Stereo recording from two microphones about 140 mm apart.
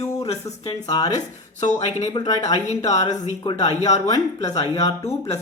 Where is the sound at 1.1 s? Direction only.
55° left (ahead or behind).